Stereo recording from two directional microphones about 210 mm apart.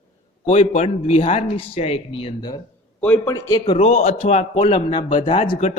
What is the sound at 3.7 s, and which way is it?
A man's voice, 30° left (ahead or behind).